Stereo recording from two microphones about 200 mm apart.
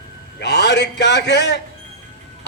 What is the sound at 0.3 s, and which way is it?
A man's voice, 60° left (ahead or behind).